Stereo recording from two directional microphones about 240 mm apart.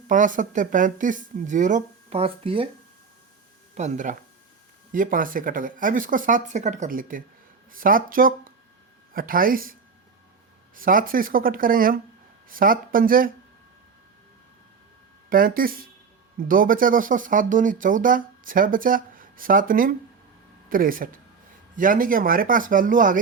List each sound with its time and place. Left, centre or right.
0.1 s speech: right
3.8 s speech: right
10.8 s speech: right
15.3 s speech: right